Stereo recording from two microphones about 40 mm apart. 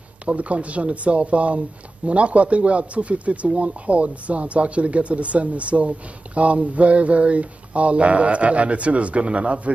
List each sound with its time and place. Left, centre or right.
0.2 s speech: right